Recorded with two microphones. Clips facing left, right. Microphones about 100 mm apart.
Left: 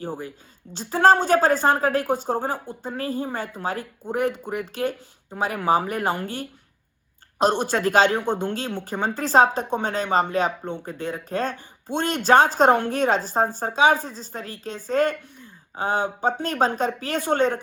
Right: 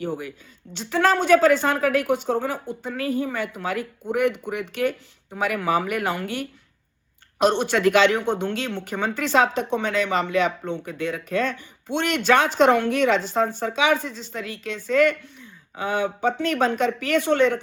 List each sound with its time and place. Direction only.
0.0 s speech: 40° left (ahead or behind)
4.0 s speech: 10° left (ahead or behind)
5.4 s speech: 40° left (ahead or behind)
8.1 s speech: 10° left (ahead or behind)
8.8 s speech: 40° left (ahead or behind)